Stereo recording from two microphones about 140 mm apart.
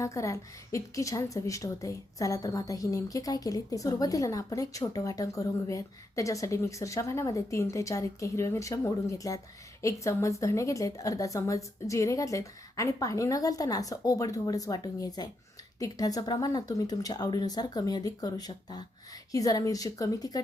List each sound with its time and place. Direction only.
0.0 s a woman's voice: 20° left (ahead or behind)